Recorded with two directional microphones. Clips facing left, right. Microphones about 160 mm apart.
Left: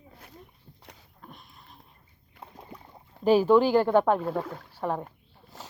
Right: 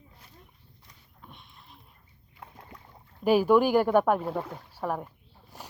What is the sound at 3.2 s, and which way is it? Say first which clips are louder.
Speech: left 1 dB; 10° right (ahead or behind).